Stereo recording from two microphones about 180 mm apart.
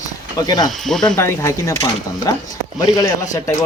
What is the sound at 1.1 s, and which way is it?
Speech, 15° left (ahead or behind).